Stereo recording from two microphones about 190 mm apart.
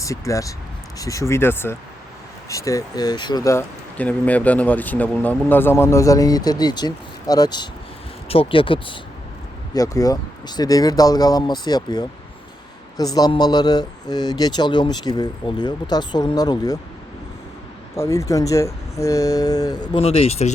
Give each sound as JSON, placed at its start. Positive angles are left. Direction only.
{"t": 0.0, "sound": "speech", "side_deg": 15}
{"t": 17.9, "sound": "speech", "side_deg": 15}